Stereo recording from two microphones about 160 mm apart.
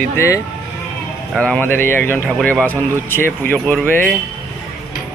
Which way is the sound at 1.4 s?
10° left (ahead or behind).